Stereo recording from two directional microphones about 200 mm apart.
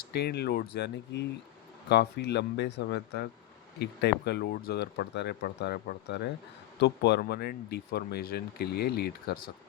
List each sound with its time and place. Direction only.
0.1 s speech: 55° left (ahead or behind)